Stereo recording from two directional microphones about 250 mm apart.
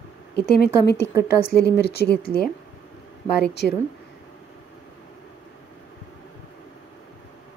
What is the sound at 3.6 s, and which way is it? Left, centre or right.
Speech, left.